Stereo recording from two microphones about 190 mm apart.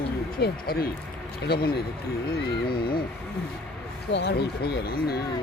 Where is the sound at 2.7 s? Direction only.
50° left (ahead or behind).